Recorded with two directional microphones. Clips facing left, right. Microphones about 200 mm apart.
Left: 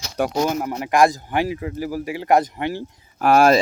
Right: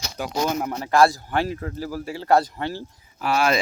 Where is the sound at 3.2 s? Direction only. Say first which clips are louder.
Left 7 dB; 50° left (ahead or behind).